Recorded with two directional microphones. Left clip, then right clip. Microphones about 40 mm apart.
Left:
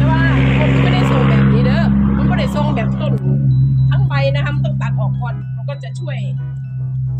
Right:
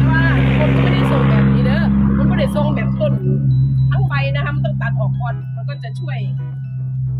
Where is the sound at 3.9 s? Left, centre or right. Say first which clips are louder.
Left 3 dB; left.